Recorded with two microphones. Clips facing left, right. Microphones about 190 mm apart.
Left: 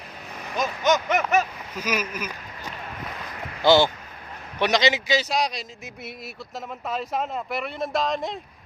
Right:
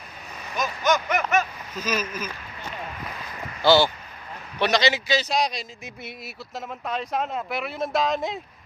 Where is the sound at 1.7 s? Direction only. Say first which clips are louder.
Even; 15° left (ahead or behind).